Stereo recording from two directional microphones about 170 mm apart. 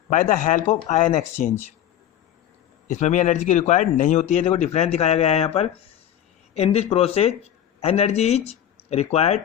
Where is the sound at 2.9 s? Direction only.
45° left (ahead or behind).